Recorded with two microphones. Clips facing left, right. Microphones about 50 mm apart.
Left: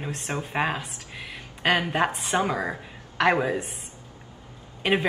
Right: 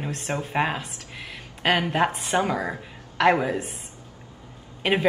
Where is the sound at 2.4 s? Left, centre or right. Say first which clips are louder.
Right 1 dB; left.